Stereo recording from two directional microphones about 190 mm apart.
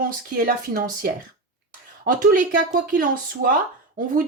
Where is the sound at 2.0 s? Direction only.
45° right (ahead or behind).